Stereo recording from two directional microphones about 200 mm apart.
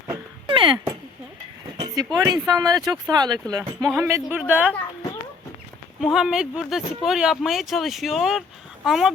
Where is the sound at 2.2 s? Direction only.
15° right (ahead or behind).